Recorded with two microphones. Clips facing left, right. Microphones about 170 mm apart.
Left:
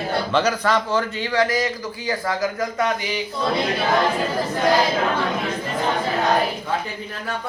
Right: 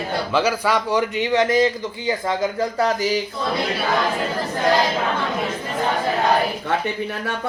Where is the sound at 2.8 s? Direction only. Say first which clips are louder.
Right 4 dB; 40° right (ahead or behind).